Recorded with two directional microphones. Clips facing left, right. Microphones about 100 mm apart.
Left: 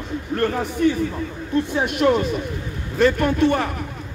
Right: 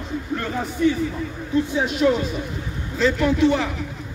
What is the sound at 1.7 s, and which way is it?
A man's voice, 60° left (ahead or behind).